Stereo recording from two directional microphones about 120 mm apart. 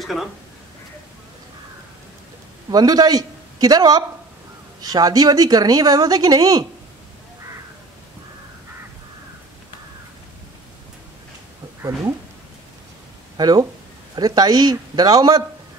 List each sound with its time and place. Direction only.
0.0 s speech: centre (ahead or behind)
2.7 s a woman's voice: 35° right (ahead or behind)
13.4 s a woman's voice: 30° right (ahead or behind)